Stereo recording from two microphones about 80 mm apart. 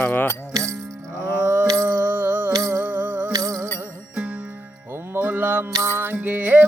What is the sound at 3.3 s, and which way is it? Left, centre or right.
Music, right.